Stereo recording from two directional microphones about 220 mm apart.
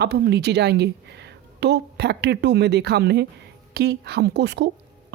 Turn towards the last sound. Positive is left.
turn(degrees=-50)  # may be behind; listen again after turning